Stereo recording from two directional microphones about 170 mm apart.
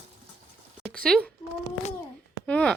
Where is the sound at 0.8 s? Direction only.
5° left (ahead or behind).